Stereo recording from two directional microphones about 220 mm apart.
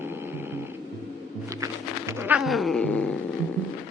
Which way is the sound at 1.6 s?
10° right (ahead or behind).